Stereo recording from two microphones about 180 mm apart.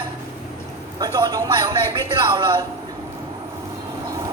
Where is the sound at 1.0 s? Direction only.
20° right (ahead or behind).